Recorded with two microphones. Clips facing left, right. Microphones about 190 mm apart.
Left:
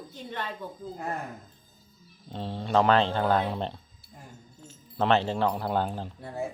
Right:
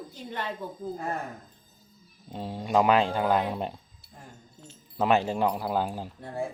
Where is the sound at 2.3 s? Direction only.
10° right (ahead or behind).